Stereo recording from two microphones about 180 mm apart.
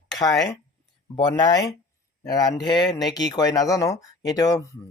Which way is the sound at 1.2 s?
25° left (ahead or behind).